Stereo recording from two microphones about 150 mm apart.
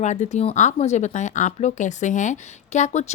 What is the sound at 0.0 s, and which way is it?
Speech, 50° left (ahead or behind).